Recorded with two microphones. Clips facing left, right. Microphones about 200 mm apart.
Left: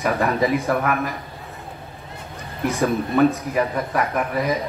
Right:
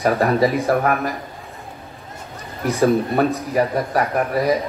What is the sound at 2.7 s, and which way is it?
A man's voice, 35° right (ahead or behind).